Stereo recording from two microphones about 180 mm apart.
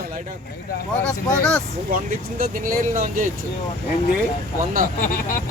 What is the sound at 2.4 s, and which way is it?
Speech, 50° right (ahead or behind).